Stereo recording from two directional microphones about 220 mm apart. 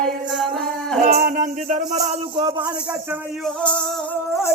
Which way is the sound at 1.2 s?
35° right (ahead or behind).